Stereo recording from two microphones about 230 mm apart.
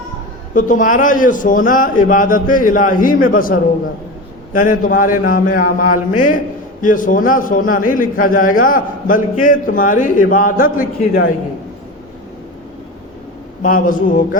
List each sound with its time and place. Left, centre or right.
0.5 s a man's voice: left
13.6 s a man's voice: left